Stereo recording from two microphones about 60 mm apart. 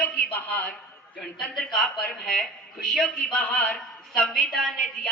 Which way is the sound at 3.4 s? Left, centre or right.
Centre.